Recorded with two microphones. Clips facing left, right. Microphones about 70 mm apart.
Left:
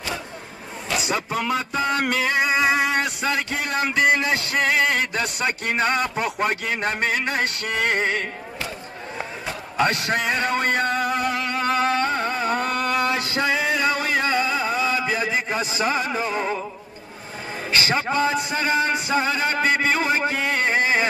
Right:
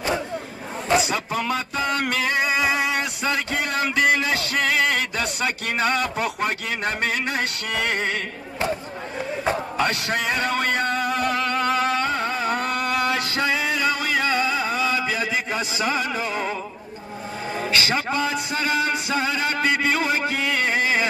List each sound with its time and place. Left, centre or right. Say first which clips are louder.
0.8 s a sound: right 6 dB; right
1.1 s music: left 1 dB; left
9.8 s speech: left 2 dB; left
12.7 s music: left 1 dB; left
17.7 s a man's voice: left 2 dB; left
18.1 s music: left 2 dB; left